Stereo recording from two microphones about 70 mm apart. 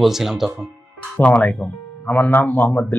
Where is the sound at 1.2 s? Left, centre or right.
Left.